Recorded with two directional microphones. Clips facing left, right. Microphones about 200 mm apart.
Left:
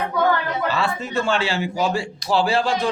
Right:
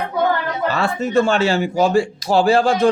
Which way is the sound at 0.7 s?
45° right (ahead or behind).